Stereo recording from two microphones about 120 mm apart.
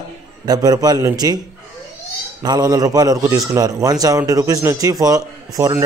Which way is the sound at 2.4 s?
35° right (ahead or behind).